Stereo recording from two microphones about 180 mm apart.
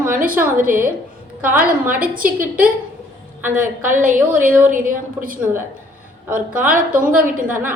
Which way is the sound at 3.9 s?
45° right (ahead or behind).